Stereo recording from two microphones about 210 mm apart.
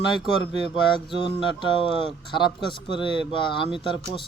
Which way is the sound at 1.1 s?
25° left (ahead or behind).